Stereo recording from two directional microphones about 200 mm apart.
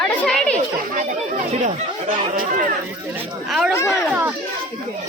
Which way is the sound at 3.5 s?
Centre (ahead or behind).